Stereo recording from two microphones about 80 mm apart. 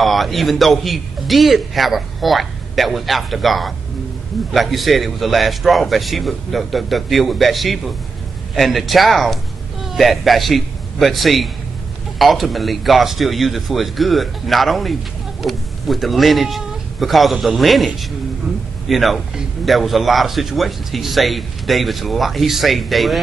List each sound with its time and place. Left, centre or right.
0.0 s a man's voice: centre